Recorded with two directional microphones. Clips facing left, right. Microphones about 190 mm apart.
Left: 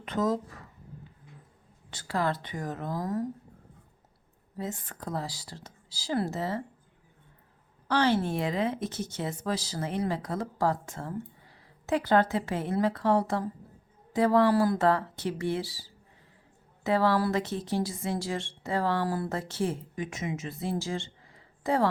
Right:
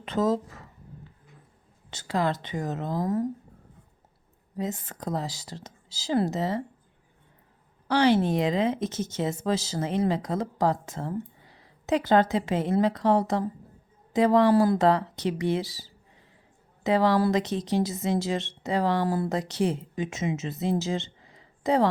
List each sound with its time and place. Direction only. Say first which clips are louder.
0.0 s speech: right 3 dB; 25° right (ahead or behind)
1.9 s speech: right 3 dB; 20° right (ahead or behind)
4.5 s speech: right 4 dB; 20° right (ahead or behind)
7.9 s speech: right 4 dB; 15° right (ahead or behind)